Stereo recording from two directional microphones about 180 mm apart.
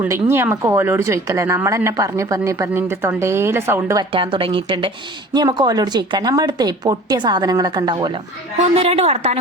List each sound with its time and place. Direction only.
0.0 s speech: 15° right (ahead or behind)
4.1 s speech: 30° right (ahead or behind)
8.7 s a woman's voice: 35° right (ahead or behind)